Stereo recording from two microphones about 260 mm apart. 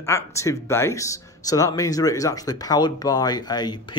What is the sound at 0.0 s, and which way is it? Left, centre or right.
Speech, centre.